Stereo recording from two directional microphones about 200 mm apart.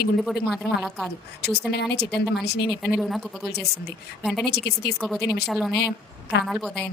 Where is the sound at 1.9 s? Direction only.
55° left (ahead or behind).